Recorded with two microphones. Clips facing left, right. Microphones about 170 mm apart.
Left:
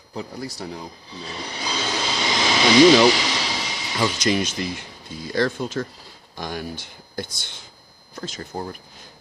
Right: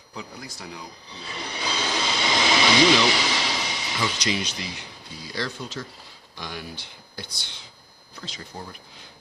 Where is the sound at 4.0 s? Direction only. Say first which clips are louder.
Left 7 dB; 50° left (ahead or behind).